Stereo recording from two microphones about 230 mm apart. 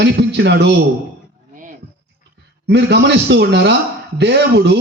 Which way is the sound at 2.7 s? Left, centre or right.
Right.